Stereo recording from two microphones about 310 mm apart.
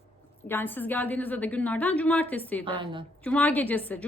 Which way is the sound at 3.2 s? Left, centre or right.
Centre.